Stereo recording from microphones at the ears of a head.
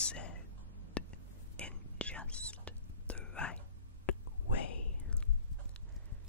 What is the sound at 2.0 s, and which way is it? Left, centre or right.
Whispering, centre.